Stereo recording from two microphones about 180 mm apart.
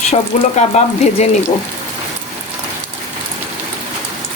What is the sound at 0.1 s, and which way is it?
Speech, 40° left (ahead or behind).